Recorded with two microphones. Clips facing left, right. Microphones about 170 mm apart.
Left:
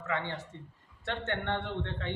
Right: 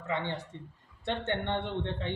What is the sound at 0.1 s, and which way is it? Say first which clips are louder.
A man's voice: right 2 dB; 20° right (ahead or behind).